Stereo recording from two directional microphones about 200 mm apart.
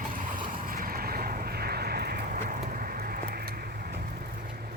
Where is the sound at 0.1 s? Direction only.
40° right (ahead or behind).